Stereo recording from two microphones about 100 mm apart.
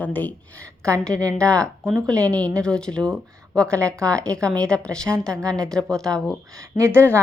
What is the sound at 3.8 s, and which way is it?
Speech, 30° right (ahead or behind).